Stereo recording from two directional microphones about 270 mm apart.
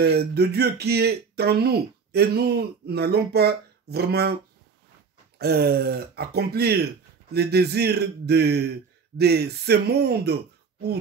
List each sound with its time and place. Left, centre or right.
0.0 s speech: right
5.4 s speech: right